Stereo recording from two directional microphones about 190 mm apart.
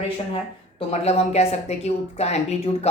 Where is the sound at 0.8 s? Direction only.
35° left (ahead or behind).